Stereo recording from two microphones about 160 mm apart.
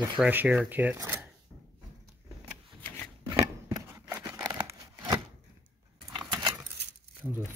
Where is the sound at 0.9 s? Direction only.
15° right (ahead or behind).